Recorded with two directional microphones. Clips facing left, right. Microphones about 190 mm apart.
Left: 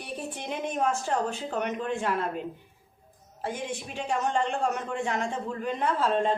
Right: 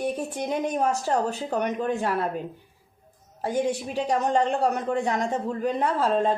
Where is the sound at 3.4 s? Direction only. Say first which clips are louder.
Right 8 dB; 40° right (ahead or behind).